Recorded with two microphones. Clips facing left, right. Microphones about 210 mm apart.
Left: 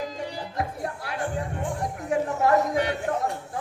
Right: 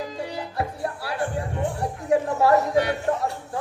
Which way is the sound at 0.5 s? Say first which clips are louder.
Right 2 dB; 35° right (ahead or behind).